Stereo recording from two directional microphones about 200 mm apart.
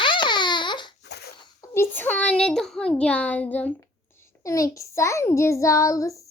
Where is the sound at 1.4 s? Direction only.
15° left (ahead or behind).